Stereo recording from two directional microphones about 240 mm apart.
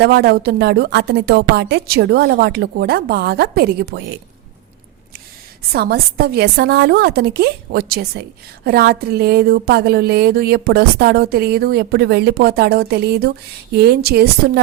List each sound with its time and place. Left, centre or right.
0.0 s a woman's voice: right
5.7 s speech: right